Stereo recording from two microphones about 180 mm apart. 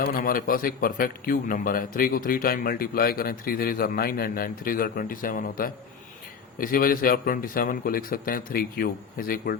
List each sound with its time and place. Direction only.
0.1 s a man's voice: 55° left (ahead or behind)